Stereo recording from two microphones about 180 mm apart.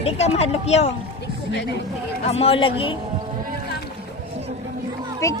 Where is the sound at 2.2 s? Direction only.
35° left (ahead or behind).